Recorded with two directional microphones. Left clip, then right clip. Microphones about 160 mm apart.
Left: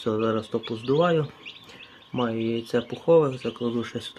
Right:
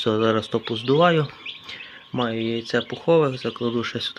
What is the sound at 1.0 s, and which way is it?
Speech, 10° right (ahead or behind).